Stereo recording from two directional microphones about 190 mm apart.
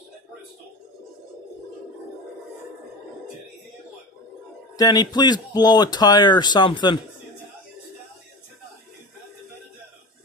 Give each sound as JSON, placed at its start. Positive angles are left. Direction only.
{"t": 4.7, "sound": "speech", "side_deg": 20}